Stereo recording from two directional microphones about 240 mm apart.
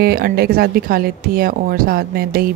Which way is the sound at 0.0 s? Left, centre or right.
Right.